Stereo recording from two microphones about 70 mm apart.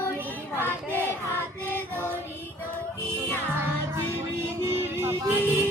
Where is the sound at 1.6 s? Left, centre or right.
Left.